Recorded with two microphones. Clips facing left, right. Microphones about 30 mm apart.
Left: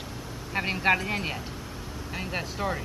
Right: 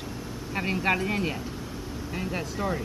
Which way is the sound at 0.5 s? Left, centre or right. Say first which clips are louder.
Left 2 dB; centre.